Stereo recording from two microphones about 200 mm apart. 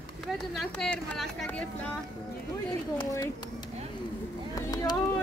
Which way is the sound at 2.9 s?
20° left (ahead or behind).